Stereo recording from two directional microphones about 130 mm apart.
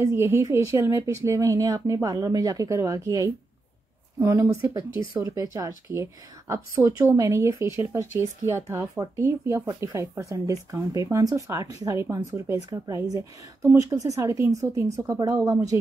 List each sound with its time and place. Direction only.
0.0 s speech: 20° right (ahead or behind)